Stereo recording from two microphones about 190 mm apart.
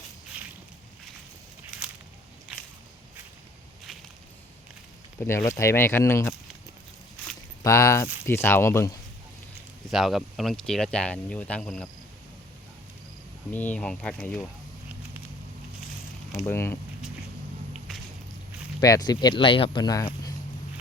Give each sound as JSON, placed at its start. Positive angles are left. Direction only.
{"t": 5.2, "sound": "speech", "side_deg": 15}
{"t": 7.6, "sound": "speech", "side_deg": 15}
{"t": 9.9, "sound": "speech", "side_deg": 0}
{"t": 13.5, "sound": "speech", "side_deg": 10}
{"t": 16.5, "sound": "speech", "side_deg": 15}
{"t": 18.8, "sound": "speech", "side_deg": 20}